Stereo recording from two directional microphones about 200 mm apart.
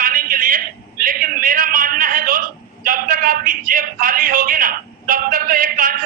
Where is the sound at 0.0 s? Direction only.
45° right (ahead or behind).